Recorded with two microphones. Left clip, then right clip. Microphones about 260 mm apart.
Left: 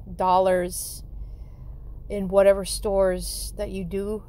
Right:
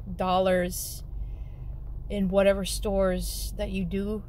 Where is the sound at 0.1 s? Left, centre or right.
Left.